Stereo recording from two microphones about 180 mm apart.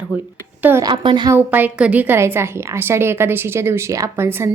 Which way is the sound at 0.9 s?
25° right (ahead or behind).